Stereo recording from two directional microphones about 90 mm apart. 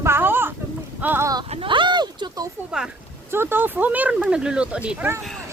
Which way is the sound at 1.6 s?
65° right (ahead or behind).